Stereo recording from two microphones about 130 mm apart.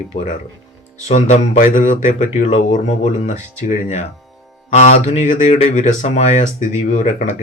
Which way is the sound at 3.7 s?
60° left (ahead or behind).